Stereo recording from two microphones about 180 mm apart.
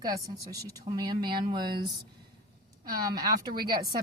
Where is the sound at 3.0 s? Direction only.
20° right (ahead or behind).